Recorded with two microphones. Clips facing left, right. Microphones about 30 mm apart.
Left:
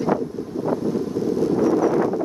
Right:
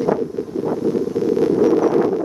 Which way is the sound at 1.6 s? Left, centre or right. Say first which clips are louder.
Right 2 dB; right.